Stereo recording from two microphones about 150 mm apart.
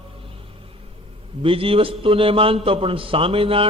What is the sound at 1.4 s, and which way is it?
A man's voice, 40° right (ahead or behind).